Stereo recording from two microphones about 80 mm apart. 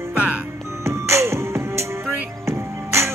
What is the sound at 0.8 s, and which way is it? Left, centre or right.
Music, right.